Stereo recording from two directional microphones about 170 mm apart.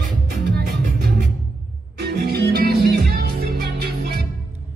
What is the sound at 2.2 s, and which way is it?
Music, 70° right (ahead or behind).